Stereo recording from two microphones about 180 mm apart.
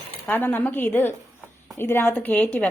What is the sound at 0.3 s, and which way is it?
Speech, 10° left (ahead or behind).